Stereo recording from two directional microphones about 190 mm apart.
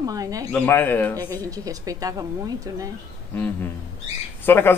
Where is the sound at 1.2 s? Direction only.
20° right (ahead or behind).